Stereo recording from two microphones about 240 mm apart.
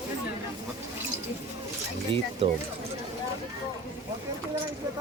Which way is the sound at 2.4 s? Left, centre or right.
Right.